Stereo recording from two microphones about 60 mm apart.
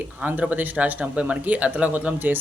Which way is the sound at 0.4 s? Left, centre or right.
Right.